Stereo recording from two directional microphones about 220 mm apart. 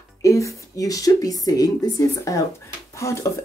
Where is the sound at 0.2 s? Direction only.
15° left (ahead or behind).